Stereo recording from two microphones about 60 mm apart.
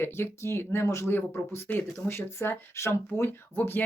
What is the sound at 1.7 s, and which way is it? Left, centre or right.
Speech, left.